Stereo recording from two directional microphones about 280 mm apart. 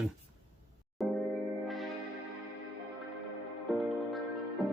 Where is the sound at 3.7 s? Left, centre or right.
Centre.